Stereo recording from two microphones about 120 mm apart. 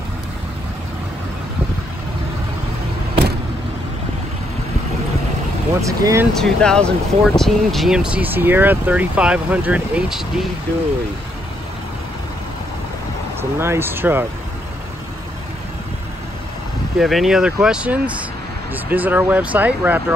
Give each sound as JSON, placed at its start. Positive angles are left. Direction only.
{"t": 5.8, "sound": "speech", "side_deg": -25}
{"t": 6.3, "sound": "speech", "side_deg": 5}
{"t": 13.4, "sound": "speech", "side_deg": -20}
{"t": 17.0, "sound": "speech", "side_deg": 0}